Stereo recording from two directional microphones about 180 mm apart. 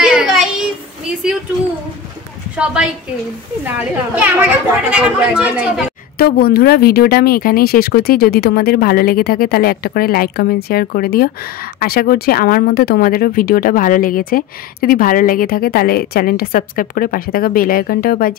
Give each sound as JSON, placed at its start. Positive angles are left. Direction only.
{"t": 0.0, "sound": "child singing", "side_deg": -5}
{"t": 2.5, "sound": "a child's voice", "side_deg": -5}
{"t": 6.1, "sound": "speech", "side_deg": 60}